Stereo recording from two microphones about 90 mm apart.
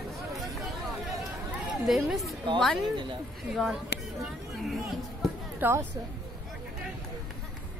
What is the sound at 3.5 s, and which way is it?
Speech, 5° right (ahead or behind).